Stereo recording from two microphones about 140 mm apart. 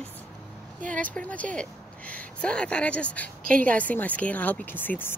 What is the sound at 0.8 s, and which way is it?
Speech, 65° right (ahead or behind).